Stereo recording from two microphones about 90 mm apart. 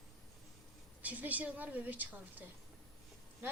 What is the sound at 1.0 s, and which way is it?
Speech, 20° right (ahead or behind).